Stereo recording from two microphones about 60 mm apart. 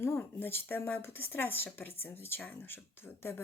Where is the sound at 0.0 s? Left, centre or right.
Left.